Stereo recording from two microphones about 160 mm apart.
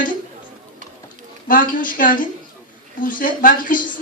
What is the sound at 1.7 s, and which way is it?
A woman's voice, 60° left (ahead or behind).